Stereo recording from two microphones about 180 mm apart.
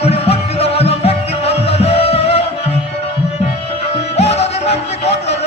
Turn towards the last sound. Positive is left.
turn(degrees=35)  # may be behind; listen again after turning